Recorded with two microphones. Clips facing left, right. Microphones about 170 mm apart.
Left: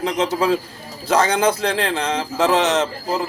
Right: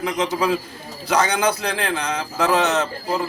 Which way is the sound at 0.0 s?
25° left (ahead or behind).